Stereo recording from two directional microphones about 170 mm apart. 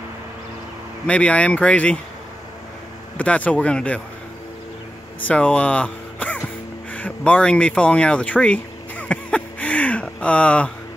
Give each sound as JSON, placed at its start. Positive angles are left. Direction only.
{"t": 1.0, "sound": "speech", "side_deg": 5}
{"t": 3.2, "sound": "speech", "side_deg": 10}
{"t": 5.2, "sound": "music", "side_deg": 5}